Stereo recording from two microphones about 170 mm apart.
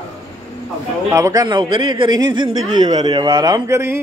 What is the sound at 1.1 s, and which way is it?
Speech, 20° right (ahead or behind).